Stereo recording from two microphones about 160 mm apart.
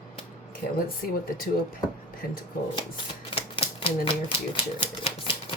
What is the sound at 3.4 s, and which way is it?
Typewriter, 35° left (ahead or behind).